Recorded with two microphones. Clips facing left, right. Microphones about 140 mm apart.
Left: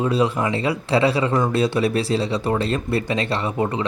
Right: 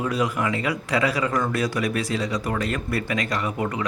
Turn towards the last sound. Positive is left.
turn(degrees=30)  # may be behind; listen again after turning